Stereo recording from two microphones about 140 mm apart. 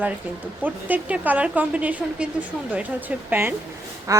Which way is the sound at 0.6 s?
10° right (ahead or behind).